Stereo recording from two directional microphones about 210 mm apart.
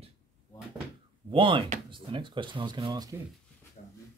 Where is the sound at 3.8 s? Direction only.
40° left (ahead or behind).